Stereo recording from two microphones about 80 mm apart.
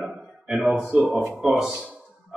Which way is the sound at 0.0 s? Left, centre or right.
Centre.